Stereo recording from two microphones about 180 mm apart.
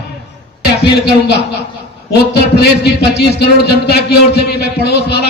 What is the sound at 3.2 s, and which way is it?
A man's voice, 65° left (ahead or behind).